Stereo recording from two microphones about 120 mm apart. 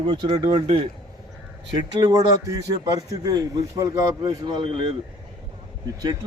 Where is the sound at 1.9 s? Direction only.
35° right (ahead or behind).